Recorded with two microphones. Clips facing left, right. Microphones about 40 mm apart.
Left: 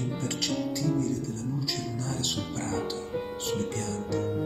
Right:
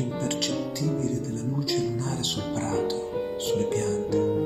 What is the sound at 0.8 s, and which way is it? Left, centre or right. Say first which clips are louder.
Music: right 1 dB; right.